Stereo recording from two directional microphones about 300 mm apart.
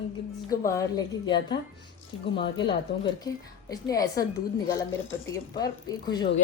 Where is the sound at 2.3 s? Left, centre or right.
Centre.